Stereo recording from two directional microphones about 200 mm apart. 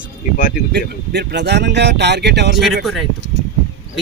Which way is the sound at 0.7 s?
55° right (ahead or behind).